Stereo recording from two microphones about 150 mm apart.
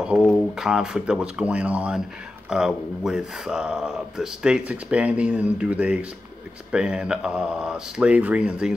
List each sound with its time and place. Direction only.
0.2 s speech: centre (ahead or behind)